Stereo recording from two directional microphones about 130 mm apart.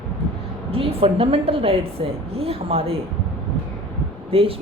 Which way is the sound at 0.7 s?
45° right (ahead or behind).